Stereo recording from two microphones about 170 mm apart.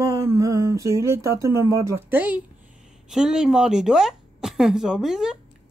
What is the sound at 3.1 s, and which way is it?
A woman's voice, 5° right (ahead or behind).